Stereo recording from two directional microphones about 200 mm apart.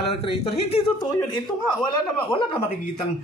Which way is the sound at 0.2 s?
30° left (ahead or behind).